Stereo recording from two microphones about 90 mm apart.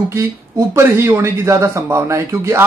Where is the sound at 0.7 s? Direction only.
25° right (ahead or behind).